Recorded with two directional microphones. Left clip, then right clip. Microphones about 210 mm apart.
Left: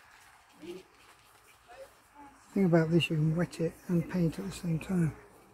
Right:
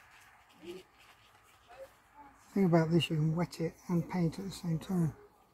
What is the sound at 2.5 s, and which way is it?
Speech, 45° right (ahead or behind).